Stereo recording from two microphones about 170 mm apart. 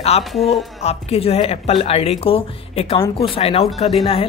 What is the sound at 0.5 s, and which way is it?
Speech, 35° left (ahead or behind).